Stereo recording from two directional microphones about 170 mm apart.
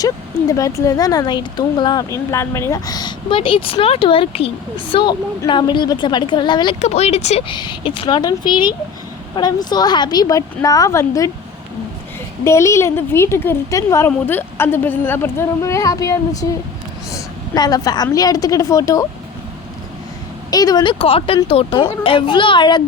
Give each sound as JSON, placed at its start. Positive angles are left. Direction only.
{"t": 0.0, "sound": "speech", "side_deg": 20}
{"t": 6.8, "sound": "speech", "side_deg": 40}
{"t": 12.5, "sound": "a woman's voice", "side_deg": 15}
{"t": 20.5, "sound": "speech", "side_deg": 20}